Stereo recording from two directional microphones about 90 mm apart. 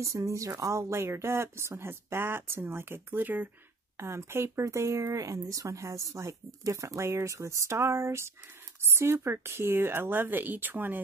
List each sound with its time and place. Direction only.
0.0 s speech: 35° right (ahead or behind)